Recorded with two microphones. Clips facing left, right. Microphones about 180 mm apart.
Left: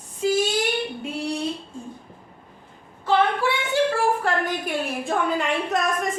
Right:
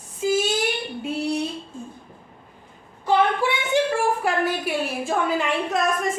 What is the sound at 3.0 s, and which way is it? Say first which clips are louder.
Child singing: right 1 dB; 15° right (ahead or behind).